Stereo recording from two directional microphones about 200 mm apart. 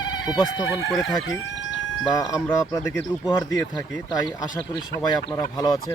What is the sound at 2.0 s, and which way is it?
Speech, 15° left (ahead or behind).